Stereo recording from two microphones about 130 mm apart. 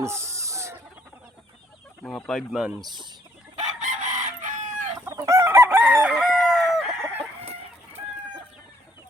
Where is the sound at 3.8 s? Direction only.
85° right.